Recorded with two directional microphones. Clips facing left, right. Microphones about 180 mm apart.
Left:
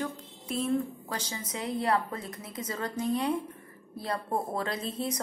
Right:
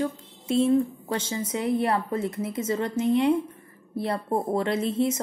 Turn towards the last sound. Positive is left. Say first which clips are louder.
# right 9 dB
turn(degrees=-25)  # may be behind; listen again after turning